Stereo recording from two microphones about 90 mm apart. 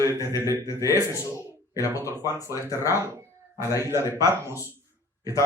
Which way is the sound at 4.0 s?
35° left (ahead or behind).